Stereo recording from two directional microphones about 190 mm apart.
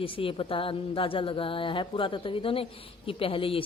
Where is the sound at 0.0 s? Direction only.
30° left (ahead or behind).